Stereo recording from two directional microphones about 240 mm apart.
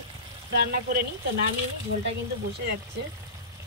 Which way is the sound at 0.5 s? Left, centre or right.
Right.